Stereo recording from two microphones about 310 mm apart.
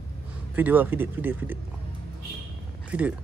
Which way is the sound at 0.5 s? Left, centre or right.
Centre.